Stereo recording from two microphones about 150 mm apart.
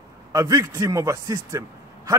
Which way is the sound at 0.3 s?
20° right (ahead or behind).